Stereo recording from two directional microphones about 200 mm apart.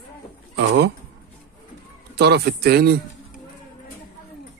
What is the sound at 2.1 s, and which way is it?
Speech, 55° right (ahead or behind).